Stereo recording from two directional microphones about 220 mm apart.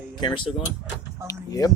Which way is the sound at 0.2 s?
20° left (ahead or behind).